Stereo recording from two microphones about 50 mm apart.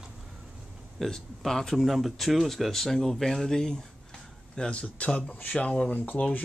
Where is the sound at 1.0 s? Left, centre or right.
Centre.